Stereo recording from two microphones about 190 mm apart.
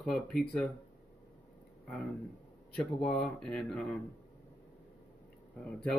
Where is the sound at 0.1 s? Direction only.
5° left (ahead or behind).